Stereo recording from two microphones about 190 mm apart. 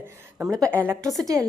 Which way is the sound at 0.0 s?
5° right (ahead or behind).